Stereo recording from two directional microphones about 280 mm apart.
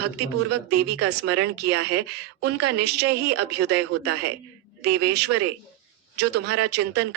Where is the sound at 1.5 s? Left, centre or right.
Right.